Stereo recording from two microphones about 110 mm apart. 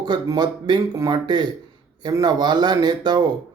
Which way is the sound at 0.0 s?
40° right (ahead or behind).